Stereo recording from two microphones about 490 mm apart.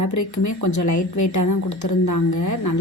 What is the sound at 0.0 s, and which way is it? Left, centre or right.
Speech, left.